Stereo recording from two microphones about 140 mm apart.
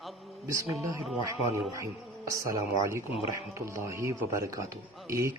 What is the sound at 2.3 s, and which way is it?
Speech, 20° right (ahead or behind).